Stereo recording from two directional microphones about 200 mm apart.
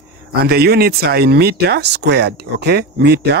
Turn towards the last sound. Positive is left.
turn(degrees=-55)  # may be behind; listen again after turning